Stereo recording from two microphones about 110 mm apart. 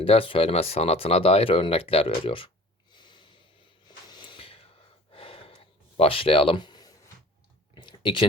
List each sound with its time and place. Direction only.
0.0 s speech: 55° left (ahead or behind)
2.9 s snort: 45° left (ahead or behind)
3.8 s gasp: 45° left (ahead or behind)
6.0 s speech: 55° left (ahead or behind); by 6.9 s 40° left (ahead or behind)
7.8 s a sound: 45° left (ahead or behind)